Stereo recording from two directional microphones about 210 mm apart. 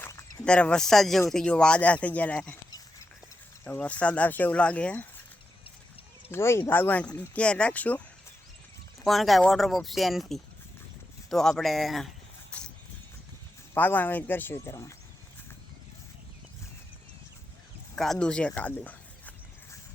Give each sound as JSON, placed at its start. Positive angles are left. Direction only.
{"t": 0.0, "sound": "speech", "side_deg": 10}
{"t": 2.6, "sound": "a sound", "side_deg": 15}
{"t": 3.6, "sound": "speech", "side_deg": 5}
{"t": 6.3, "sound": "speech", "side_deg": 10}
{"t": 9.0, "sound": "speech", "side_deg": 0}
{"t": 13.7, "sound": "speech", "side_deg": 10}
{"t": 17.9, "sound": "speech", "side_deg": 0}